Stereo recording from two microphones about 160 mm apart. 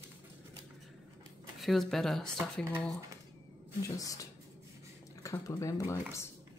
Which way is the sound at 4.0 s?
20° left (ahead or behind).